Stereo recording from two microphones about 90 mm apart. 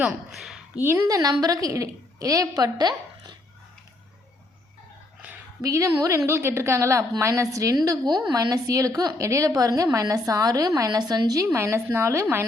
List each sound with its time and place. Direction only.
0.0 s a woman's voice: 5° right (ahead or behind)
0.8 s a woman's voice: 25° right (ahead or behind)
1.0 s a woman's voice: 40° right (ahead or behind)
5.2 s a sound: 15° right (ahead or behind)
5.6 s a woman's voice: 35° right (ahead or behind)
11.4 s a woman's voice: 30° right (ahead or behind)